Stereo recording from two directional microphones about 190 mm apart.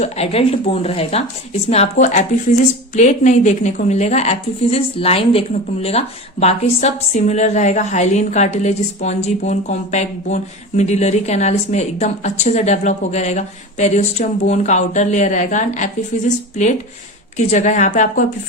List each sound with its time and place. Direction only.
0.0 s a woman's voice: 35° left (ahead or behind)
17.3 s a woman's voice: 35° left (ahead or behind)